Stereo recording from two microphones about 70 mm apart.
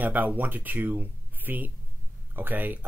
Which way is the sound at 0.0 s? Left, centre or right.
Right.